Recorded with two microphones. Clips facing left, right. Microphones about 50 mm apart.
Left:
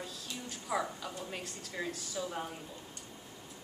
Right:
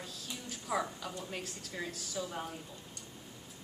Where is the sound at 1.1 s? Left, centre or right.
Centre.